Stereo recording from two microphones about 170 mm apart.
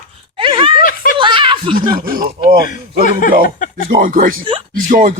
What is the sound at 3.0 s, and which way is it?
Speech, 50° left (ahead or behind).